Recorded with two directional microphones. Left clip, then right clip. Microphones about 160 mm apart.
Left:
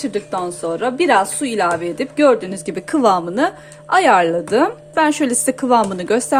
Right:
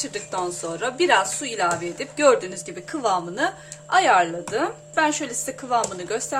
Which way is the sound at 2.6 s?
60° left (ahead or behind).